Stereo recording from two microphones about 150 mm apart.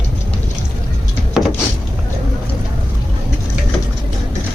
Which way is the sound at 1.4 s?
5° right (ahead or behind).